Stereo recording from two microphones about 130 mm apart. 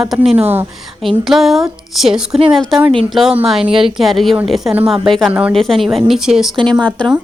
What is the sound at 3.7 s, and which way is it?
Speech, 45° right (ahead or behind).